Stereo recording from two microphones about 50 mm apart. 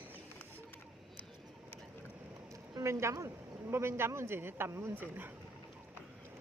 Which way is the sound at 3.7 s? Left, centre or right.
Right.